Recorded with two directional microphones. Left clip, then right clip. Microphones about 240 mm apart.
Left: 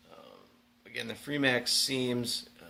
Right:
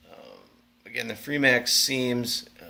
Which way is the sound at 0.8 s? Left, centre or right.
Centre.